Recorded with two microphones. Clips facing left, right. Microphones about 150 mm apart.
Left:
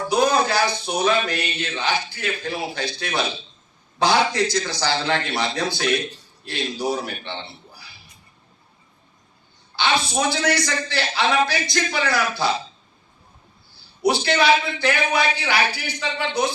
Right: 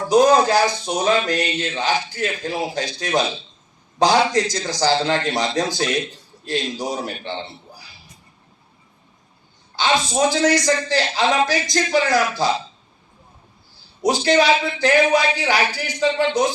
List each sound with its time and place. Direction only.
0.1 s a man's voice: 40° right (ahead or behind)
9.7 s speech: 40° right (ahead or behind)
14.0 s speech: 40° right (ahead or behind)